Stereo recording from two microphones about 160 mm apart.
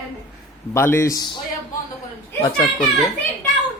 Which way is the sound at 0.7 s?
15° left (ahead or behind).